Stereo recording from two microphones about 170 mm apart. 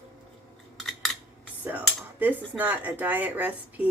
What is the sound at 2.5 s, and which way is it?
Speech, 10° right (ahead or behind).